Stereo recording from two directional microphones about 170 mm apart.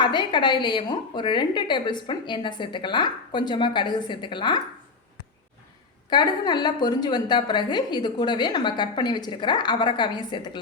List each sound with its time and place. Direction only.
0.0 s a woman's voice: 25° left (ahead or behind)
6.1 s a woman's voice: 25° left (ahead or behind)